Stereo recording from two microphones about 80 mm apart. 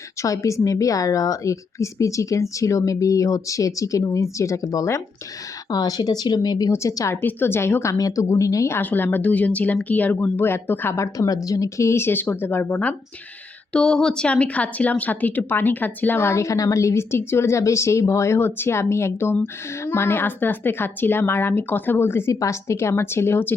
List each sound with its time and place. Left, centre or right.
0.2 s a woman's voice: left
5.7 s speech: left
6.7 s a woman's voice: left
7.2 s a woman's voice: left
7.9 s a woman's voice: left
8.8 s a woman's voice: left
22.3 s a woman's voice: left